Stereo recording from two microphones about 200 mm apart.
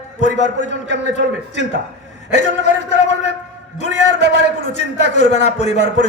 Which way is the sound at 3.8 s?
35° left (ahead or behind).